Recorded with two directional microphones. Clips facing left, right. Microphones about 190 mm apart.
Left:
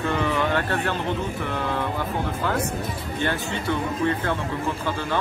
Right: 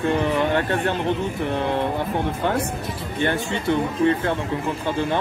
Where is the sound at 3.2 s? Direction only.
20° right (ahead or behind).